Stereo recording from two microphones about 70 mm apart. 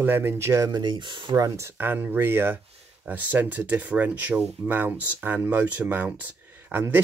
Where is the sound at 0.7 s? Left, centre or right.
Right.